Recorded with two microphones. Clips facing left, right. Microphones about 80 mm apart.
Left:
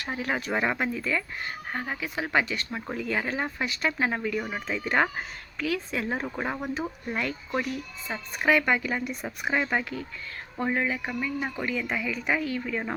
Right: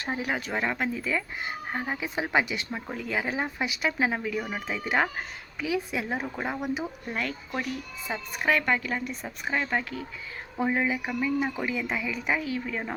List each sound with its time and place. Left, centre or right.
0.0 s speech: right
0.3 s a woman's voice: centre
0.9 s speech: centre
2.7 s speech: centre
3.0 s a woman's voice: centre
8.0 s a woman's voice: centre
10.6 s a woman's voice: centre